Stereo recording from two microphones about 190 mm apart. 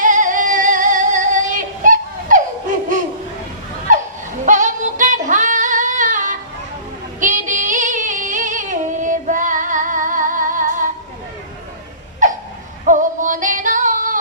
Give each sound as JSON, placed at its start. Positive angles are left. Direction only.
{"t": 0.0, "sound": "female singing", "side_deg": -40}
{"t": 3.9, "sound": "snicker", "side_deg": -40}
{"t": 4.4, "sound": "singing", "side_deg": -40}
{"t": 7.2, "sound": "female singing", "side_deg": -40}
{"t": 12.8, "sound": "female singing", "side_deg": -45}